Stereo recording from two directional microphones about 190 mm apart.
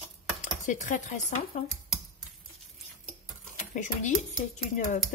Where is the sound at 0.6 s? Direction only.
40° left (ahead or behind).